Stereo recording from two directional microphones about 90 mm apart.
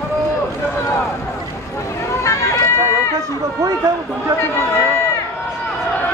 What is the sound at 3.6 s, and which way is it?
Speech, 35° right (ahead or behind).